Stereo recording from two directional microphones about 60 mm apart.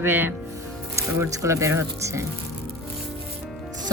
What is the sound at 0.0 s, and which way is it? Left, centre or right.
Speech, right.